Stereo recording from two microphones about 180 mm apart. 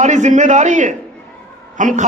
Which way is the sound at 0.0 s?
40° right (ahead or behind).